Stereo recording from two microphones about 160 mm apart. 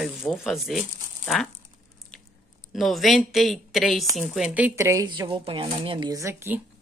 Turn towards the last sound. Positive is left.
turn(degrees=-15)  # may be behind; listen again after turning